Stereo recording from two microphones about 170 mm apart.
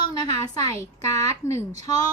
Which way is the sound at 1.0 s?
20° left (ahead or behind).